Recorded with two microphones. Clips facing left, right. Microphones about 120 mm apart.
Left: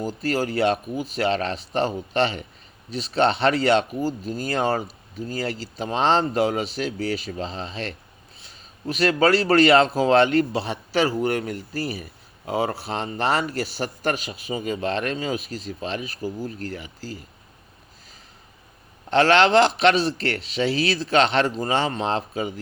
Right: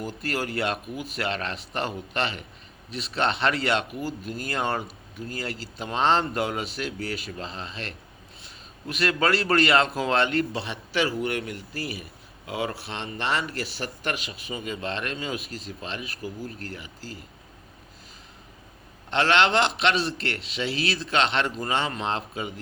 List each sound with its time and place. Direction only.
0.0 s speech: 30° left (ahead or behind)
6.7 s speech: 50° right (ahead or behind)
7.3 s speech: 30° left (ahead or behind)
8.9 s speech: 35° left (ahead or behind)
19.1 s speech: 40° left (ahead or behind)